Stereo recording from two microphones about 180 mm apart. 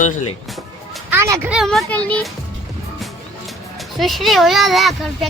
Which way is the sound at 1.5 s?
Centre (ahead or behind).